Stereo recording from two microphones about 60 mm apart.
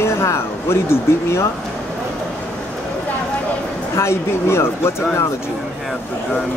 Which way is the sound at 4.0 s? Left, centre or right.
Left.